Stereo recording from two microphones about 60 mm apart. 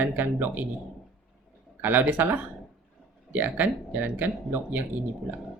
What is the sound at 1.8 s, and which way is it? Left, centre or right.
Speech, right.